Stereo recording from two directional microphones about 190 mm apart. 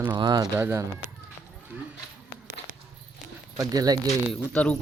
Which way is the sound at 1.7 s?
10° right (ahead or behind).